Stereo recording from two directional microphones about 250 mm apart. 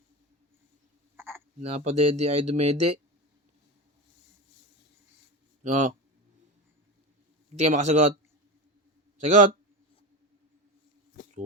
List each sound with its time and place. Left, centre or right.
1.1 s frog: centre
1.6 s speech: right
5.6 s speech: right
7.5 s speech: right
9.1 s a man's voice: right